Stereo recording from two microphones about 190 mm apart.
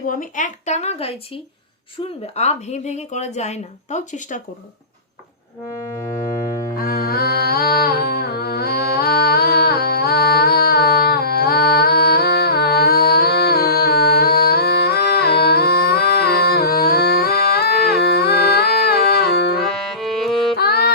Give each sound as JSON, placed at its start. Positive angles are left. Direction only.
{"t": 0.1, "sound": "speech", "side_deg": 45}
{"t": 2.3, "sound": "speech", "side_deg": 35}
{"t": 6.7, "sound": "music", "side_deg": 50}
{"t": 19.6, "sound": "music", "side_deg": 0}
{"t": 20.6, "sound": "music", "side_deg": 55}